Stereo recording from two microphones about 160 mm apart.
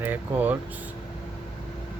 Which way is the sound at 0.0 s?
10° right (ahead or behind).